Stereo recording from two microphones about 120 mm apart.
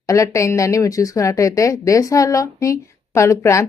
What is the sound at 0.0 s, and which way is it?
Speech, 25° left (ahead or behind).